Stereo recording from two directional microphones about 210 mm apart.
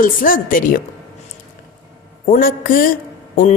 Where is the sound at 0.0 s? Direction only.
40° left (ahead or behind).